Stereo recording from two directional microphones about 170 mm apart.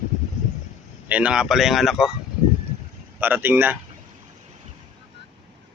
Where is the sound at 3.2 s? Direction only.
10° right (ahead or behind).